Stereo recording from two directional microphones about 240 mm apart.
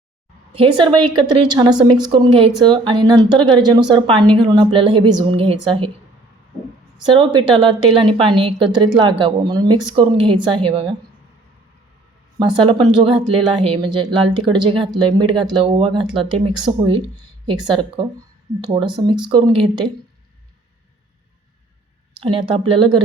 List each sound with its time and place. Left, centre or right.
0.5 s speech: right
7.0 s speech: centre
12.4 s speech: centre
22.2 s speech: right